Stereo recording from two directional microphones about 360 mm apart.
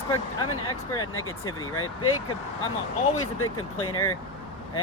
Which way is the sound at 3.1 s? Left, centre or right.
Left.